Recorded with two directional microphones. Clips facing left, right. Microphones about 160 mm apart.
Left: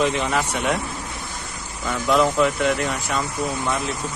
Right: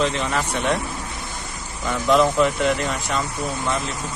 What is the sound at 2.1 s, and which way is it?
Speech, centre (ahead or behind).